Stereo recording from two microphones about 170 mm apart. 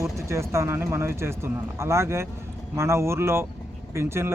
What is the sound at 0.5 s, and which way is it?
A man's voice, 15° right (ahead or behind).